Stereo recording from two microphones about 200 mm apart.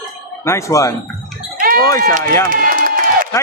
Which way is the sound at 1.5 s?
45° right (ahead or behind).